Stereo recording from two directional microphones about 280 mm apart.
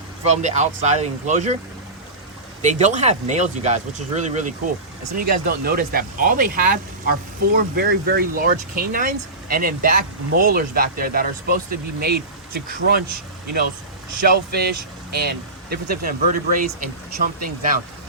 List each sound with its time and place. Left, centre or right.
0.3 s speech: right
2.6 s speech: right
14.3 s speech: right